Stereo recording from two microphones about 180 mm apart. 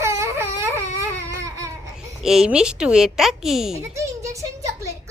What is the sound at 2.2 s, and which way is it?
A child's voice, 5° right (ahead or behind).